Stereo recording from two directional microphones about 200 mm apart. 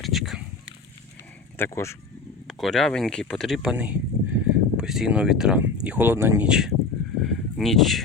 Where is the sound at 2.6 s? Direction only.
Centre (ahead or behind).